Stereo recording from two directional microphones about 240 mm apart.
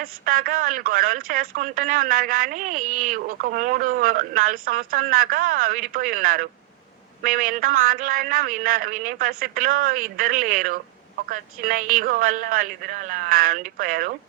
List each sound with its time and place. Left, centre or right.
0.0 s speech: right